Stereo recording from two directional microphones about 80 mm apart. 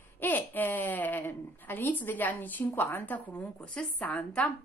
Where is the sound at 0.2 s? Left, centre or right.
Left.